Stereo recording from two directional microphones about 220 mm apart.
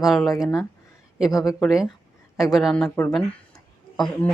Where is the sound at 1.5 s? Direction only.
Centre (ahead or behind).